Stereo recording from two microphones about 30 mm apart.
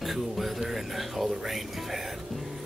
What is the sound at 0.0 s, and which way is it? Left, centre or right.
Music, centre.